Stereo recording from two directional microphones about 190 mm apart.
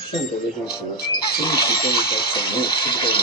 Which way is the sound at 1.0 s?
55° left (ahead or behind).